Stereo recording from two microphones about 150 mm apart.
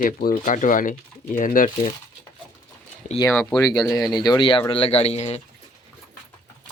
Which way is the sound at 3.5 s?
20° left (ahead or behind).